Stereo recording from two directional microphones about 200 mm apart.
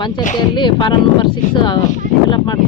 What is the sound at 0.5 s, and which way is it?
Speech, 25° left (ahead or behind).